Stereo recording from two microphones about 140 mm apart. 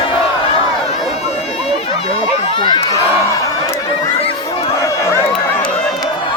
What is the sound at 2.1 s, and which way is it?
Run, 35° left (ahead or behind).